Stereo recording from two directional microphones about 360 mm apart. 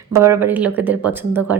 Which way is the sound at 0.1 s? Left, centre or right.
Centre.